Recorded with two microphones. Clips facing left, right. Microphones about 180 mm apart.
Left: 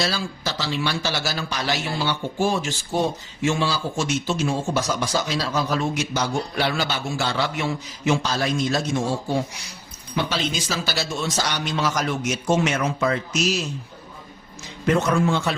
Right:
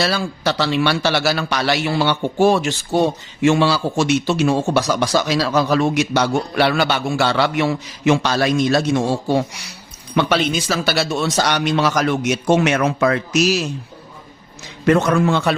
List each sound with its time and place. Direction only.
0.0 s a man's voice: 65° right (ahead or behind)
14.8 s a man's voice: 70° right (ahead or behind)